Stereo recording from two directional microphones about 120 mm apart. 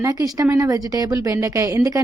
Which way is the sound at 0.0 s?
30° right (ahead or behind).